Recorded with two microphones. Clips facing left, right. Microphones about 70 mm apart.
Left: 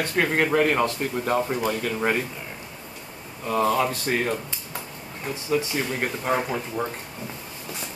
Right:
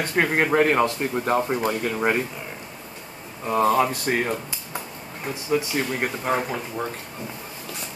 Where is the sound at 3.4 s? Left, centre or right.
Right.